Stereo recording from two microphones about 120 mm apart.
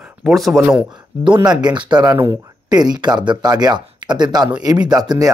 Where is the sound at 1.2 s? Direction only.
40° right (ahead or behind).